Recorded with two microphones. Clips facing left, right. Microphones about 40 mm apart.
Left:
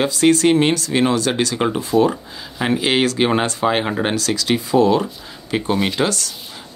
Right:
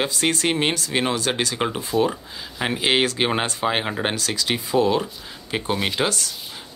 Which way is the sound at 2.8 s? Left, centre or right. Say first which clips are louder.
Left 2 dB; centre.